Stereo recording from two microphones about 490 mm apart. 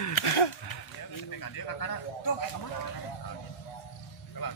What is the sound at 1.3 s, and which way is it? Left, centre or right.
Speech, left.